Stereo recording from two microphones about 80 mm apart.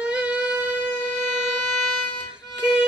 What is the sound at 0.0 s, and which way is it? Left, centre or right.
Wind instrument, centre.